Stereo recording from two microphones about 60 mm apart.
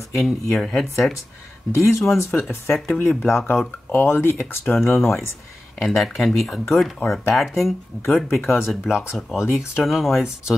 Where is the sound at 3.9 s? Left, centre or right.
Left.